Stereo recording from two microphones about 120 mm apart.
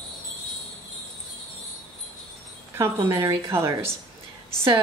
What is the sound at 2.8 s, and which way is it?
A woman's voice, 20° right (ahead or behind).